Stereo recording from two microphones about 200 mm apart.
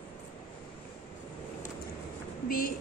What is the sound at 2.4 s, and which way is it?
Speech, 45° left (ahead or behind).